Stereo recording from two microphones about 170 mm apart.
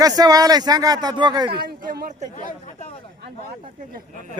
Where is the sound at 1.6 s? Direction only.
60° right (ahead or behind).